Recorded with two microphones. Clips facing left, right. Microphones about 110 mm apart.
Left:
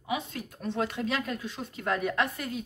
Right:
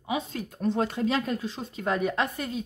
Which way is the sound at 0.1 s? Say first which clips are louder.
Right 3 dB; 30° right (ahead or behind).